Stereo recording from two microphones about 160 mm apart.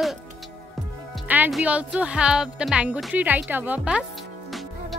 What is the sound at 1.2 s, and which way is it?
Speech, 10° right (ahead or behind).